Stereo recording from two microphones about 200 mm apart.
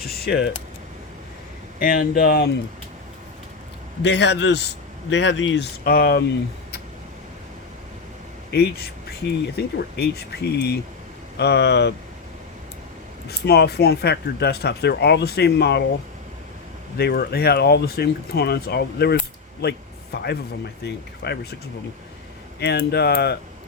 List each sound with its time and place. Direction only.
0.0 s a sound: 50° left (ahead or behind)
1.8 s speech: 50° left (ahead or behind)
4.0 s speech: 60° left (ahead or behind)
5.8 s speech: 50° left (ahead or behind)
8.4 s speech: 55° left (ahead or behind)
13.2 s speech: 55° left (ahead or behind)
17.0 s speech: 50° left (ahead or behind)
22.6 s speech: 55° left (ahead or behind)